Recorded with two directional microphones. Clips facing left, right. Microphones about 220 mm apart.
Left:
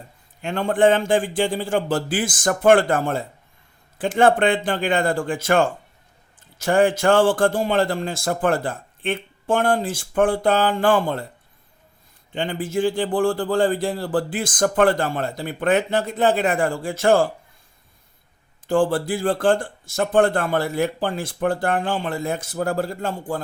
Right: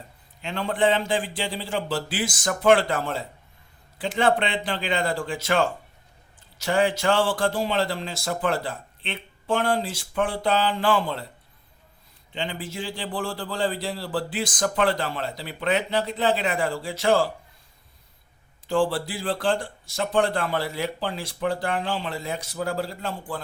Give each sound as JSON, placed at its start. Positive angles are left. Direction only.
{"t": 0.4, "sound": "a man's voice", "side_deg": 50}
{"t": 12.3, "sound": "a man's voice", "side_deg": 50}
{"t": 18.7, "sound": "a man's voice", "side_deg": 50}